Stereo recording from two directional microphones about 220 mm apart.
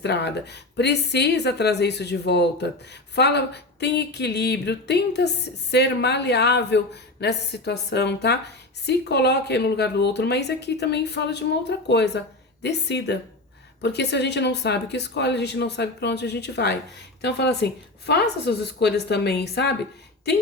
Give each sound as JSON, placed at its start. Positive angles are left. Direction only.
{"t": 0.0, "sound": "speech", "side_deg": 50}